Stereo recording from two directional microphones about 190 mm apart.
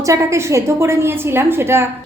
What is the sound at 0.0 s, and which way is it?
A woman's voice, 15° right (ahead or behind).